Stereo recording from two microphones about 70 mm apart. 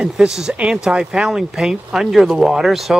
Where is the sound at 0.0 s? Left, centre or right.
Centre.